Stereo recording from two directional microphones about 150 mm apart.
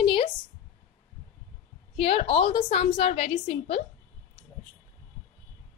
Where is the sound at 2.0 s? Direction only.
40° left (ahead or behind).